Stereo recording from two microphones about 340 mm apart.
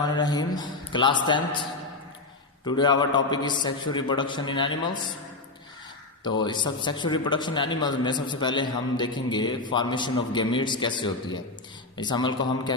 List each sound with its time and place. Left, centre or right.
0.0 s a man's voice: centre
2.6 s a man's voice: centre
6.2 s a man's voice: centre